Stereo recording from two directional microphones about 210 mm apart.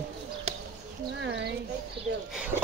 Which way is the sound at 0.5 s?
30° right (ahead or behind).